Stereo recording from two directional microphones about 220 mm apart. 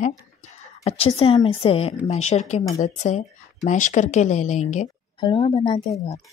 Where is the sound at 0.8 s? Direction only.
25° left (ahead or behind).